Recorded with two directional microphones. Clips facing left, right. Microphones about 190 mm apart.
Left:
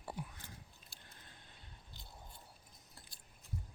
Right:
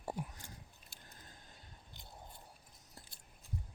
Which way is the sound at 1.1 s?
40° right (ahead or behind).